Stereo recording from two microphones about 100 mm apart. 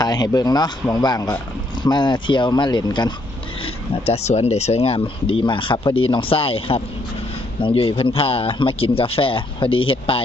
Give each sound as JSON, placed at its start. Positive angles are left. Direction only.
{"t": 0.0, "sound": "speech", "side_deg": 40}
{"t": 4.0, "sound": "speech", "side_deg": 90}